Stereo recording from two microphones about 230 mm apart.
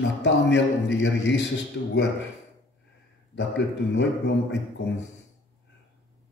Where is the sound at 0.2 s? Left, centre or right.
Left.